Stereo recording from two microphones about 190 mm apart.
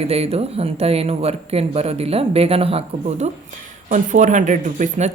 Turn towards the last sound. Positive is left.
turn(degrees=-40)  # may be behind; listen again after turning